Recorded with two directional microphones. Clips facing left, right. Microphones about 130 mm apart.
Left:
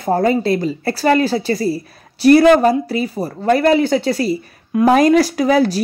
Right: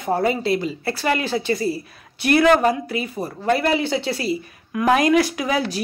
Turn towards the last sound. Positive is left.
turn(degrees=40)  # may be behind; listen again after turning